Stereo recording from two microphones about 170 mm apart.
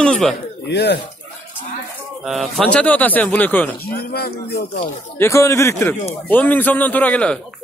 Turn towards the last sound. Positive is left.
turn(degrees=5)  # may be behind; listen again after turning